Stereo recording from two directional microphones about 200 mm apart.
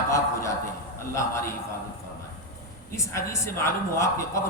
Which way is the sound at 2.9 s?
15° left (ahead or behind).